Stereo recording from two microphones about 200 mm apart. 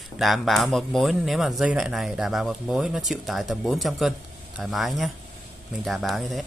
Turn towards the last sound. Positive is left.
turn(degrees=0)  # may be behind; listen again after turning